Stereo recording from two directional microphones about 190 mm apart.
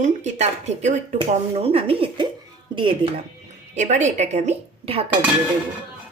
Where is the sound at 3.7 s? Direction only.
40° right (ahead or behind).